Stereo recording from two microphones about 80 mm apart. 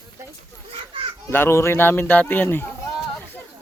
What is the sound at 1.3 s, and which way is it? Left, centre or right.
Speech, left.